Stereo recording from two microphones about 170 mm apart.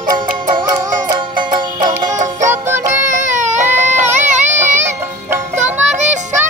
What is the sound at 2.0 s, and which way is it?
Music, 45° right (ahead or behind).